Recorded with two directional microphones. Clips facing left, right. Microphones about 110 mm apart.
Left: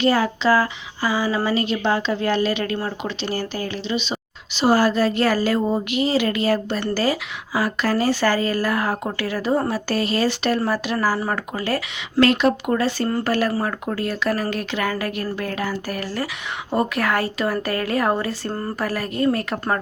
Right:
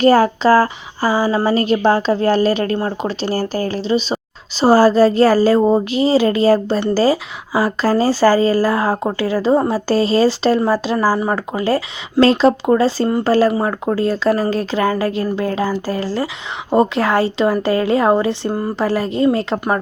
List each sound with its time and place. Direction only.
0.0 s speech: 40° right (ahead or behind)
11.2 s speech: 20° right (ahead or behind)